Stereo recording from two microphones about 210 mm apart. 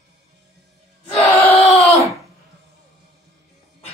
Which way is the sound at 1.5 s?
30° left (ahead or behind).